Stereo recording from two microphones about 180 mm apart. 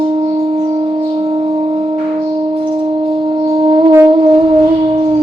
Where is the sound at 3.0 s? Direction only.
30° right (ahead or behind).